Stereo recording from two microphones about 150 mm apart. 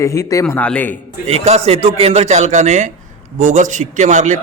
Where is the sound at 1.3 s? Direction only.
45° right (ahead or behind).